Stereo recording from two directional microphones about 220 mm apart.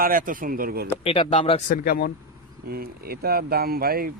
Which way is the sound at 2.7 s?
45° right (ahead or behind).